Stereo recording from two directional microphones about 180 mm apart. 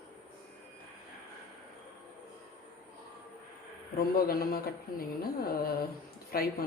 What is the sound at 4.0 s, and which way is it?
Speech, 55° left (ahead or behind).